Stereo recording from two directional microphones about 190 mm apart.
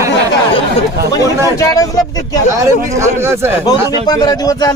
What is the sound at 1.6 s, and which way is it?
Speech, 15° left (ahead or behind).